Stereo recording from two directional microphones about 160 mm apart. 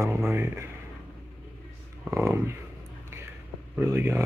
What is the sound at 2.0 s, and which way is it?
Speech, 15° right (ahead or behind).